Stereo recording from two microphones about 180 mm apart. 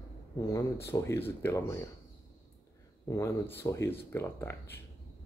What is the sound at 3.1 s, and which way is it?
Speech, 15° left (ahead or behind).